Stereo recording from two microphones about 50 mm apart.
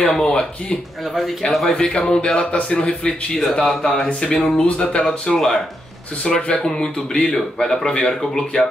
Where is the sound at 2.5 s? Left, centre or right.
Left.